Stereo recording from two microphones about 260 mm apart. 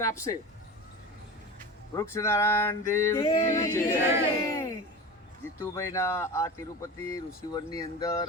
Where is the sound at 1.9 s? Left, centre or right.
Centre.